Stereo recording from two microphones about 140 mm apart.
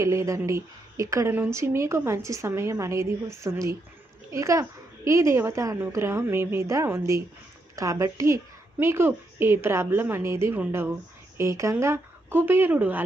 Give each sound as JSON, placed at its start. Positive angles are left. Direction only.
{"t": 0.0, "sound": "a woman's voice", "side_deg": -20}